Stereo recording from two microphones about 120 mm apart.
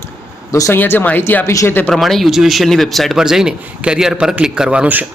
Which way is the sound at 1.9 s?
Centre (ahead or behind).